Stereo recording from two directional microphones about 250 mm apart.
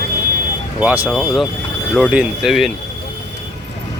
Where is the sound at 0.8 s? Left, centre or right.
Centre.